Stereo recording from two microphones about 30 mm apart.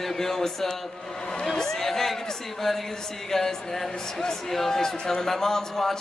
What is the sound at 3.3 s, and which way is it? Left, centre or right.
Speech, centre.